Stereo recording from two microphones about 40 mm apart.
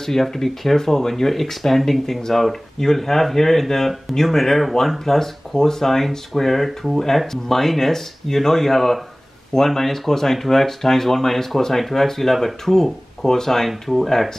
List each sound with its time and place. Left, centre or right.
0.0 s speech: centre